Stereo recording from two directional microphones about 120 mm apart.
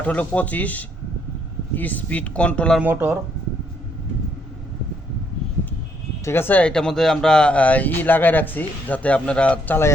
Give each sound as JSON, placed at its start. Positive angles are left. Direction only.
{"t": 0.0, "sound": "speech", "side_deg": 10}
{"t": 2.8, "sound": "speech", "side_deg": -15}
{"t": 6.2, "sound": "speech", "side_deg": 20}